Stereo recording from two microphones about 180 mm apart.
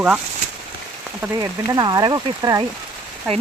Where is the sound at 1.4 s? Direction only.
25° right (ahead or behind).